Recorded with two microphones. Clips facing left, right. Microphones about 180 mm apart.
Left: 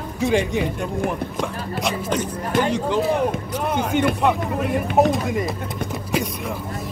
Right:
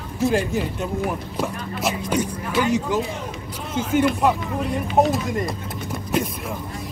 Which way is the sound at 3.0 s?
60° left (ahead or behind).